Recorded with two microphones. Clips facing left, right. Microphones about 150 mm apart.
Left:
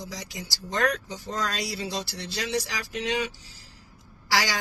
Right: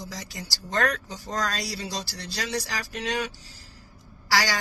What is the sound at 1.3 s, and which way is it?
Speech, 40° right (ahead or behind).